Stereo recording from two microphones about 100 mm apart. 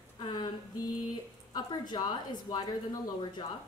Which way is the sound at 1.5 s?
45° left (ahead or behind).